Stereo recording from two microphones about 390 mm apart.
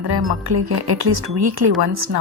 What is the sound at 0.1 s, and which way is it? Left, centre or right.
Speech, right.